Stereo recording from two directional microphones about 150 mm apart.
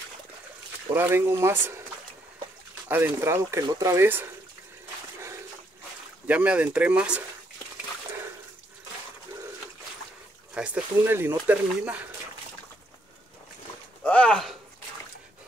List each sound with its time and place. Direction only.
0.9 s speech: 15° right (ahead or behind)
2.9 s speech: 15° right (ahead or behind)
6.2 s speech: 10° right (ahead or behind)
10.5 s speech: 10° right (ahead or behind)
14.0 s speech: 10° left (ahead or behind)